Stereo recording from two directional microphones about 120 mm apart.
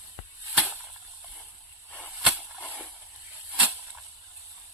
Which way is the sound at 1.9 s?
10° left (ahead or behind).